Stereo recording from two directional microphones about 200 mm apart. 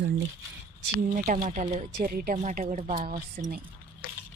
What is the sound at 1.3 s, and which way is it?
A woman's voice, 40° right (ahead or behind).